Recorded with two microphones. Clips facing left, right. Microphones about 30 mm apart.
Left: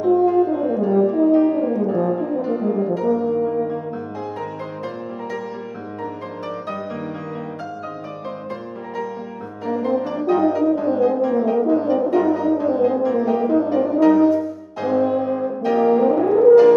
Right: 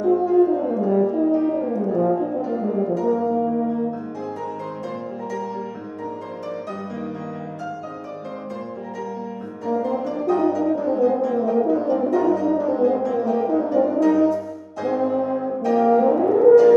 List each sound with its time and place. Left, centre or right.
0.0 s french horn: left
4.4 s music: left
9.7 s music: left
13.4 s french horn: left